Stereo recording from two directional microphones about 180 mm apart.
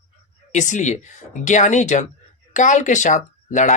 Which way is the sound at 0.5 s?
45° left (ahead or behind).